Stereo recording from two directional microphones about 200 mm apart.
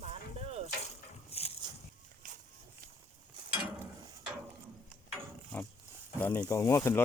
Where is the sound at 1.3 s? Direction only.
30° left (ahead or behind).